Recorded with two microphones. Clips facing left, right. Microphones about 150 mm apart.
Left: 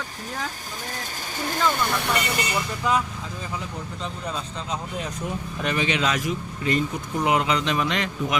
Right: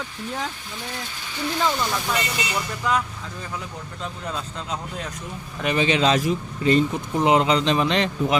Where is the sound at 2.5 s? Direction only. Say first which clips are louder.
Right 1 dB; 5° left (ahead or behind).